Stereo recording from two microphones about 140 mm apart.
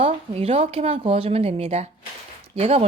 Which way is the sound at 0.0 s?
45° right (ahead or behind).